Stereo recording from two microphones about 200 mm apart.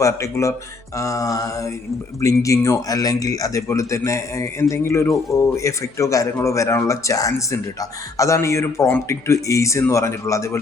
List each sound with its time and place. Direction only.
0.0 s speech: 15° left (ahead or behind)